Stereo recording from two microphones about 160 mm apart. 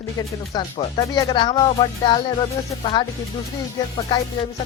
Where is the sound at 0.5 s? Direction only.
25° left (ahead or behind).